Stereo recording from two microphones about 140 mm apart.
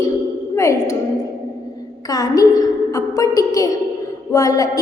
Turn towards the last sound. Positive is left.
turn(degrees=25)  # may be behind; listen again after turning